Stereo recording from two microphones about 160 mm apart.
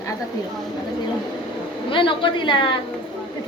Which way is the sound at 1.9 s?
30° left (ahead or behind).